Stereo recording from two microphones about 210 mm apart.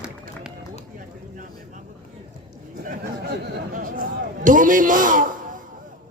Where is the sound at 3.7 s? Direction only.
40° right (ahead or behind).